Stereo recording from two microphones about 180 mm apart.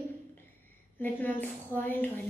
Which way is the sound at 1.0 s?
10° left (ahead or behind).